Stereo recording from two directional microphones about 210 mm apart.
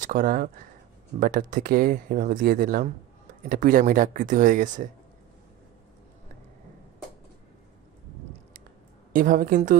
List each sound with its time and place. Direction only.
0.0 s speech: 40° right (ahead or behind)
9.1 s speech: 40° right (ahead or behind)